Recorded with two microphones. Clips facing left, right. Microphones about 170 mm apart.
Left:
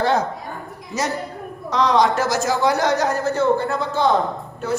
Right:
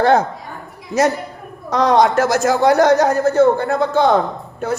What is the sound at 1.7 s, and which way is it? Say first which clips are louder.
A man's voice: right 4 dB; 50° right (ahead or behind).